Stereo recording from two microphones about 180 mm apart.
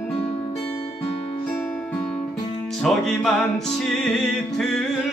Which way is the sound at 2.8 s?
5° left (ahead or behind).